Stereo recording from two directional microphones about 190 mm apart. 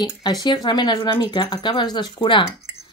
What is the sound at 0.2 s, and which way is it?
Speech, 20° left (ahead or behind).